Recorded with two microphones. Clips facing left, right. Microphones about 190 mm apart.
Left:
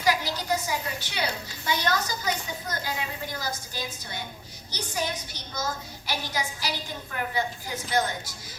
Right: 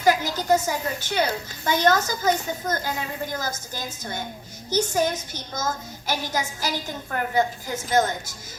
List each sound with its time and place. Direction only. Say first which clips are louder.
0.0 s a woman's voice: right 5 dB; 50° right (ahead or behind)